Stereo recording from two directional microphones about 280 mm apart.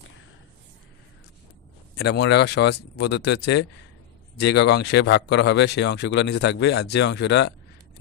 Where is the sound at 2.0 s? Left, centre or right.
Left.